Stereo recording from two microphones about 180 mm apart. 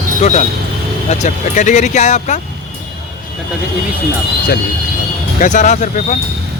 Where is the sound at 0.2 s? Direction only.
40° left (ahead or behind).